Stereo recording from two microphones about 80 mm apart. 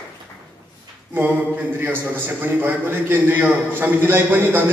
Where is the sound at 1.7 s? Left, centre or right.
Right.